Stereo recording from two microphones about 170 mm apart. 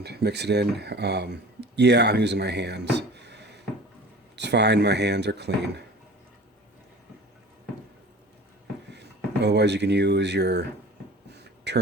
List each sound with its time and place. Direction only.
0.0 s speech: 75° right (ahead or behind)
8.9 s speech: 85° right
11.3 s a sound: 85° right